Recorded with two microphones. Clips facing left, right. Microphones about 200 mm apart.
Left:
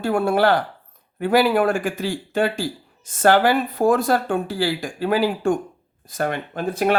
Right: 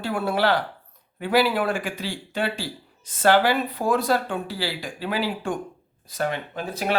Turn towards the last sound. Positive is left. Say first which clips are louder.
# left 7 dB
turn(degrees=50)  # may be behind; listen again after turning